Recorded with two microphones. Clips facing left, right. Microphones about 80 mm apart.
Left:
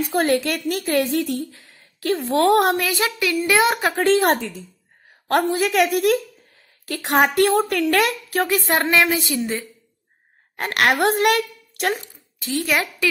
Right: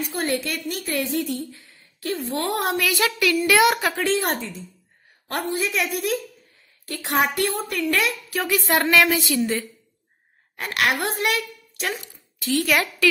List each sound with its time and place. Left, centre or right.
0.1 s a woman's voice: left
2.8 s a woman's voice: left
3.9 s a woman's voice: left
5.3 s a woman's voice: left
7.9 s a woman's voice: left
8.5 s a woman's voice: left
10.5 s a woman's voice: left
11.0 s a woman's voice: left
12.4 s a woman's voice: centre